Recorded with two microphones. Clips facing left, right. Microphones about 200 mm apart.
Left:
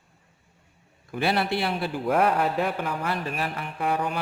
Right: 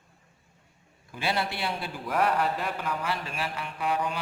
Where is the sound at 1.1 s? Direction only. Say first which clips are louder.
Left 5 dB; 60° left (ahead or behind).